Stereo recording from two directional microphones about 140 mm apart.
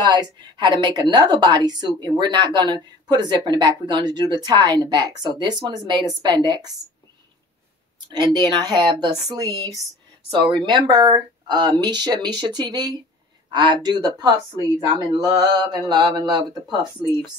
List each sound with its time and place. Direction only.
0.0 s a woman's voice: 30° right (ahead or behind)
8.1 s a woman's voice: 30° right (ahead or behind)
15.1 s mantra: 25° right (ahead or behind)
15.9 s a woman's voice: 30° right (ahead or behind)